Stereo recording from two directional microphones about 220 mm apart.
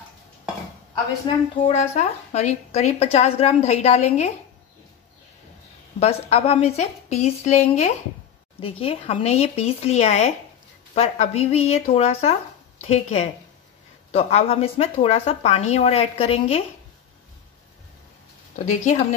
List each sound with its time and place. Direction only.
1.2 s a woman's voice: 30° left (ahead or behind)
5.9 s a woman's voice: 30° left (ahead or behind)